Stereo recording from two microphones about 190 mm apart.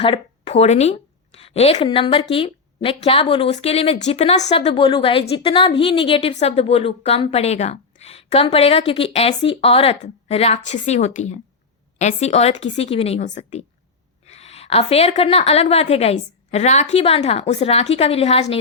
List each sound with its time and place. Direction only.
0.0 s a woman's voice: 30° left (ahead or behind)